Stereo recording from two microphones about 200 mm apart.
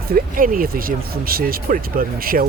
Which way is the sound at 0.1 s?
45° right (ahead or behind).